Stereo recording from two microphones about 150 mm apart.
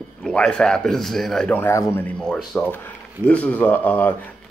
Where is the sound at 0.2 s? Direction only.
5° left (ahead or behind).